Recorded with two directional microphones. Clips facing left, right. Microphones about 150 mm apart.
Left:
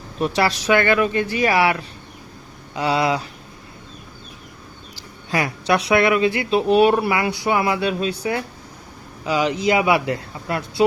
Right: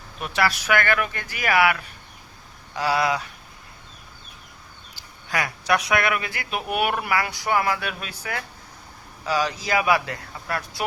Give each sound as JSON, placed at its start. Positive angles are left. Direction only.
{"t": 0.2, "sound": "speech", "side_deg": 30}
{"t": 5.3, "sound": "speech", "side_deg": 25}